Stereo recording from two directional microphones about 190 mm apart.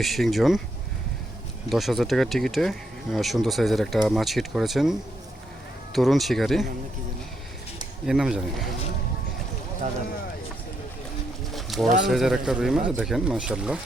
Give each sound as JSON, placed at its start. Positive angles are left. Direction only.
{"t": 0.0, "sound": "speech", "side_deg": 0}
{"t": 1.7, "sound": "speech", "side_deg": 0}
{"t": 8.0, "sound": "speech", "side_deg": -5}
{"t": 11.5, "sound": "pigeon", "side_deg": 0}
{"t": 12.0, "sound": "speech", "side_deg": 0}